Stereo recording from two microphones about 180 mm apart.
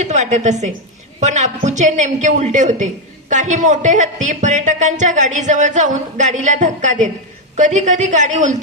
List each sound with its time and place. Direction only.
0.0 s a woman's voice: 40° right (ahead or behind)